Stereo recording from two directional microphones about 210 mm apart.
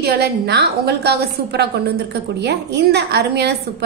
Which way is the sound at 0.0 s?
50° right (ahead or behind).